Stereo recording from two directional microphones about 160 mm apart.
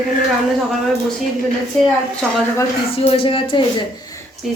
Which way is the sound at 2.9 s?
35° left (ahead or behind).